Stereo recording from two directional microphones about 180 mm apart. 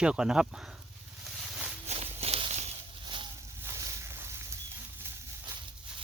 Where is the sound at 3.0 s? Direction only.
25° right (ahead or behind).